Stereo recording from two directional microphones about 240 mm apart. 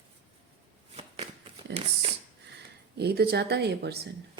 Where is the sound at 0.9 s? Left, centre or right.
Right.